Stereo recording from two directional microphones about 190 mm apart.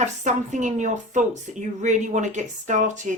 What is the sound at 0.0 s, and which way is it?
A woman's voice, 40° right (ahead or behind).